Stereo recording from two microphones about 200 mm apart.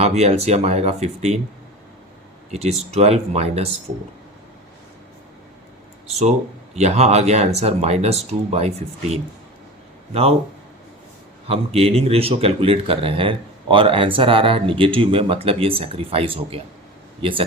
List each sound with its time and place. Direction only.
0.0 s speech: 35° right (ahead or behind)
2.5 s speech: 35° right (ahead or behind)
6.1 s speech: 30° right (ahead or behind)
11.4 s a man's voice: 30° right (ahead or behind)